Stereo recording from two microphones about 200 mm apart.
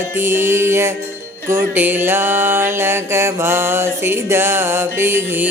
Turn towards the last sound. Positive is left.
turn(degrees=-10)  # may be behind; listen again after turning